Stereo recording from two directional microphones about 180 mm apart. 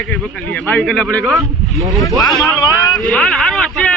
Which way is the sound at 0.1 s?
5° left (ahead or behind).